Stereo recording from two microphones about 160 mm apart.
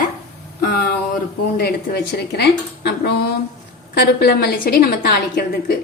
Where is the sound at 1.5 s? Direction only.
90° left; by 5.7 s 75° left (ahead or behind).